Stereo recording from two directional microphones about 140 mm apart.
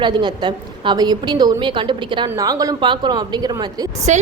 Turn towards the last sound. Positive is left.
turn(degrees=-60)  # may be behind; listen again after turning